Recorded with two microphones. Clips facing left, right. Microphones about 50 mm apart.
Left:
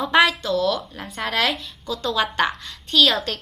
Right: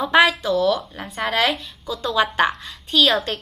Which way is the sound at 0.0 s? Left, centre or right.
Centre.